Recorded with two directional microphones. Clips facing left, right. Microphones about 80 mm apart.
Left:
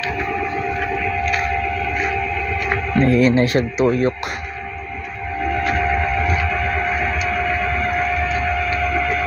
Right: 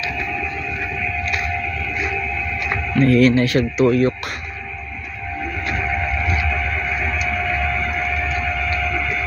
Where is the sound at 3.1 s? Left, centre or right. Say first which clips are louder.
Right 1 dB; left.